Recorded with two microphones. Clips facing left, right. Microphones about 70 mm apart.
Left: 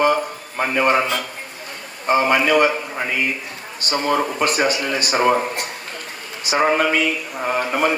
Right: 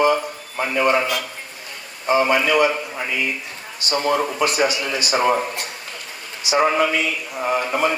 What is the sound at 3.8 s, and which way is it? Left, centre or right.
Speech, left.